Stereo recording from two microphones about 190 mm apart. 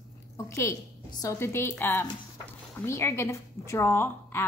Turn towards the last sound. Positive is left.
turn(degrees=10)  # may be behind; listen again after turning